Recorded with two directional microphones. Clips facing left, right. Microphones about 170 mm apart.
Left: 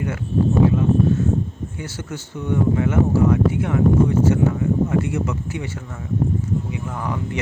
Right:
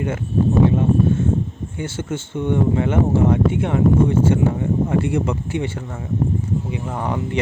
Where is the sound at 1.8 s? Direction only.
25° right (ahead or behind).